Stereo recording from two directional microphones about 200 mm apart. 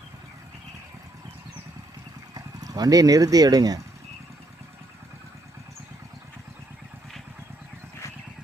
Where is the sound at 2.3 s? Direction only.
20° right (ahead or behind).